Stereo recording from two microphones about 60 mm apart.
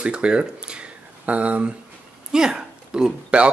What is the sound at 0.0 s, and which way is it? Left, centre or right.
Speech, centre.